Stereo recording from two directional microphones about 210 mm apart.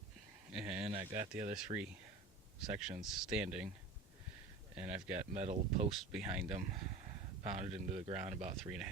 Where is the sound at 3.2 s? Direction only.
5° right (ahead or behind).